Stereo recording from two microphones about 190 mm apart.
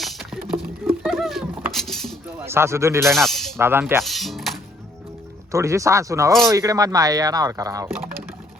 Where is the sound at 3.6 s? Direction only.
10° right (ahead or behind).